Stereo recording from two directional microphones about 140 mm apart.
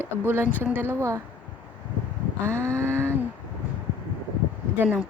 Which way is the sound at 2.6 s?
20° right (ahead or behind).